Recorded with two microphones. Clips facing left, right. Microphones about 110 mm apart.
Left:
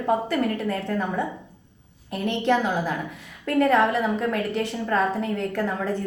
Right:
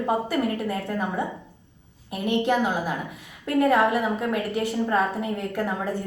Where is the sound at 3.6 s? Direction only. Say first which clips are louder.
Even; 15° right (ahead or behind).